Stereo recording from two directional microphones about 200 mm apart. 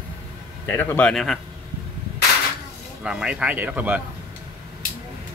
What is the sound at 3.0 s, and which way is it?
Speech, 5° right (ahead or behind).